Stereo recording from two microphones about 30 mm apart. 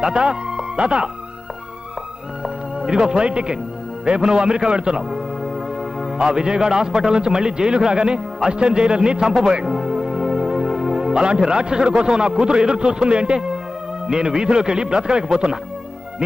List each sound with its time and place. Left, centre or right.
0.1 s speech: right
2.4 s a man's voice: right
9.8 s music: right
10.6 s music: centre
11.1 s a man's voice: right